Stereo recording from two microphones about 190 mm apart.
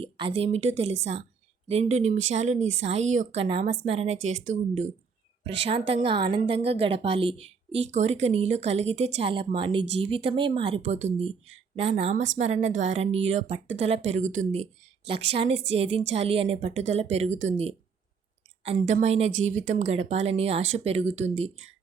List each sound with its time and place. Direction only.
0.0 s a woman's voice: 30° right (ahead or behind)
5.9 s a woman's voice: 30° right (ahead or behind)
18.8 s a woman's voice: 40° right (ahead or behind)